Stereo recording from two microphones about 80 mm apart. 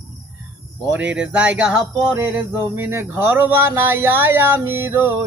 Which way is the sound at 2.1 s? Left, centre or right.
Right.